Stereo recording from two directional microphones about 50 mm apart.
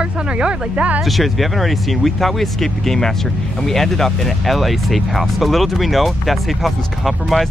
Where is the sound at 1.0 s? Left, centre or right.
Centre.